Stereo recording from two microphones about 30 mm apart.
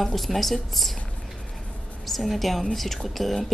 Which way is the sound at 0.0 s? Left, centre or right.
Centre.